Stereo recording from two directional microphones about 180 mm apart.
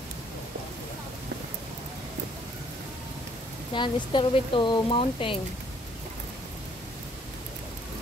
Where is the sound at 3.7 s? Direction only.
25° left (ahead or behind).